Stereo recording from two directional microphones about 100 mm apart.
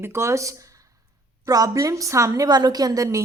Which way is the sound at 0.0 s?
25° right (ahead or behind).